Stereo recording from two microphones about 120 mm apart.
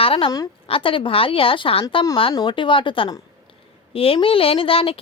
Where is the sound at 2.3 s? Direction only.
40° left (ahead or behind).